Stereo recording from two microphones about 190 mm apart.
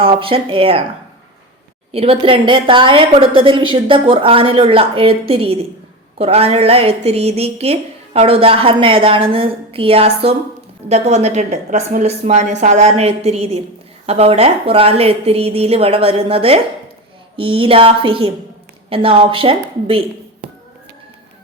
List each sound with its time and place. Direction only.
0.0 s a woman's voice: 30° right (ahead or behind)
1.9 s a woman's voice: 30° right (ahead or behind)